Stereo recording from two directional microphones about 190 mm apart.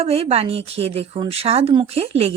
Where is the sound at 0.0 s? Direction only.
30° right (ahead or behind).